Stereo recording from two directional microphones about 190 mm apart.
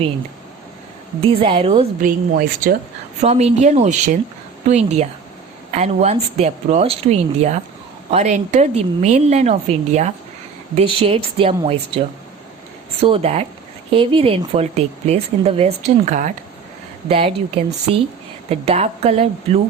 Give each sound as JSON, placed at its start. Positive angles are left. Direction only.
{"t": 1.2, "sound": "speech", "side_deg": -30}
{"t": 2.0, "sound": "speech", "side_deg": -50}
{"t": 3.2, "sound": "speech", "side_deg": -35}